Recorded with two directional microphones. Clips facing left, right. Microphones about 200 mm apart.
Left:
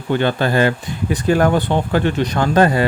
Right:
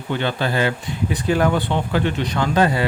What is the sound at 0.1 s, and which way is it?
Speech, 50° left (ahead or behind).